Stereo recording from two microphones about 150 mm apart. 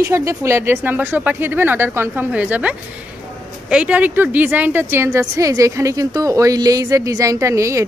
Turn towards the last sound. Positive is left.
turn(degrees=-20)  # may be behind; listen again after turning